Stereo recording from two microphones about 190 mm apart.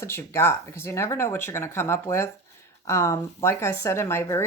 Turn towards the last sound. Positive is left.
turn(degrees=15)  # may be behind; listen again after turning